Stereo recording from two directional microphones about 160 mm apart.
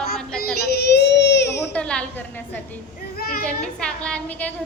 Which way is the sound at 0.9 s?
90° left.